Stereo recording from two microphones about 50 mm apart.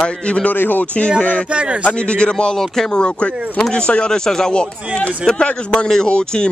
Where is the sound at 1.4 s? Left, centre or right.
Right.